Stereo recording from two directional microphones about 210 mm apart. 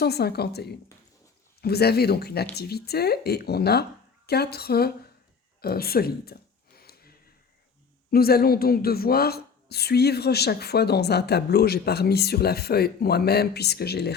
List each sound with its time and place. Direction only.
0.0 s a woman's voice: 50° left (ahead or behind)
6.7 s a sound: 45° left (ahead or behind)
8.1 s a woman's voice: 45° left (ahead or behind)